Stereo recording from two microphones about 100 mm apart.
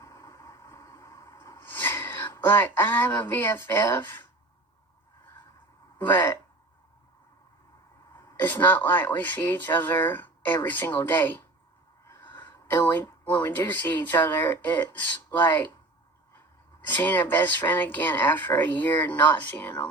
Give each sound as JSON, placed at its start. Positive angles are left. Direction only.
{"t": 0.0, "sound": "vehicle", "side_deg": 30}
{"t": 1.6, "sound": "speech", "side_deg": 20}
{"t": 6.0, "sound": "speech", "side_deg": 25}
{"t": 8.1, "sound": "speech", "side_deg": 20}
{"t": 16.9, "sound": "speech", "side_deg": 20}